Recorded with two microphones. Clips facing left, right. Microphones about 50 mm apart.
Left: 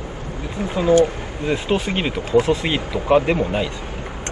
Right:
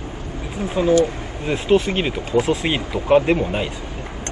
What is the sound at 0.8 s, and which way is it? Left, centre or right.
Speech, left.